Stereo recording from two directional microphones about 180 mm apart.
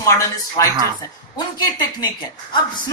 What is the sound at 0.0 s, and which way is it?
A woman's voice, 15° left (ahead or behind).